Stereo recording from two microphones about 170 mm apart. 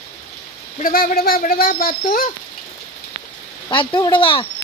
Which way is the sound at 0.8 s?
60° left (ahead or behind).